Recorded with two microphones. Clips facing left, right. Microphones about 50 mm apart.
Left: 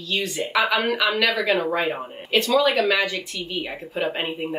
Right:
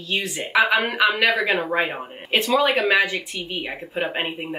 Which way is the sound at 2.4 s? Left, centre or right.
Right.